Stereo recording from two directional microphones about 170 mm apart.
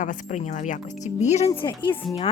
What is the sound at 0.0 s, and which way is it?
Speech, 45° left (ahead or behind).